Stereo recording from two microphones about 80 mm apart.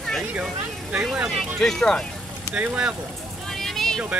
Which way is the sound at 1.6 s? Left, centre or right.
Centre.